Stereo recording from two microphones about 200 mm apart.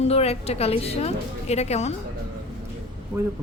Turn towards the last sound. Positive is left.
turn(degrees=-15)  # may be behind; listen again after turning